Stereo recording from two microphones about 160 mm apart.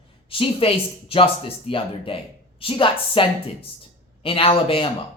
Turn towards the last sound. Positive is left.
turn(degrees=35)  # may be behind; listen again after turning